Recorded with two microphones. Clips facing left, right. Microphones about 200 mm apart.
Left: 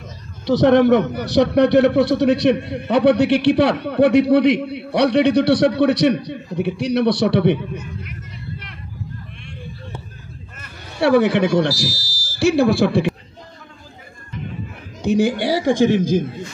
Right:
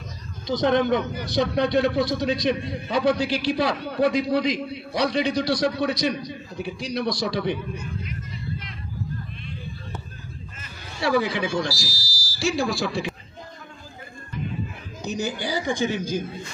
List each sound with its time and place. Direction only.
0.5 s a man's voice: 70° left (ahead or behind)
10.6 s speech: 65° left (ahead or behind)
15.0 s speech: 55° left (ahead or behind)
15.8 s a man's voice: 90° left